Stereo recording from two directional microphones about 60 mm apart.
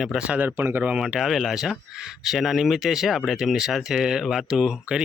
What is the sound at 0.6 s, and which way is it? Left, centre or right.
Speech, right.